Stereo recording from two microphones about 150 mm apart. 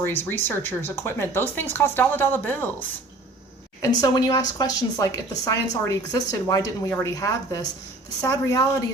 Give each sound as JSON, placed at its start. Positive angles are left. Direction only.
{"t": 0.0, "sound": "speech", "side_deg": 15}
{"t": 3.8, "sound": "speech", "side_deg": 25}